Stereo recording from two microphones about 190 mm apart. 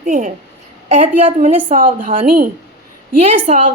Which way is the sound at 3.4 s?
35° right (ahead or behind).